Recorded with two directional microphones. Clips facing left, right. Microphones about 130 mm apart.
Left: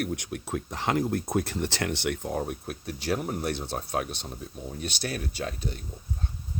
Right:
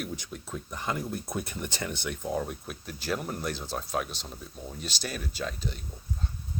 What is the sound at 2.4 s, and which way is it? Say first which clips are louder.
Speech: left 2 dB; 55° left (ahead or behind).